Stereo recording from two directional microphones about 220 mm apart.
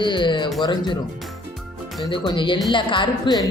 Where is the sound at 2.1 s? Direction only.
20° left (ahead or behind).